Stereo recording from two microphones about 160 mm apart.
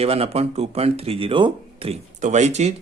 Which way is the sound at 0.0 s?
40° right (ahead or behind).